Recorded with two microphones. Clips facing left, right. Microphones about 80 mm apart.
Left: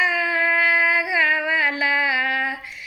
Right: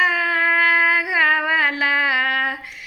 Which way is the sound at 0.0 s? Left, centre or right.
Right.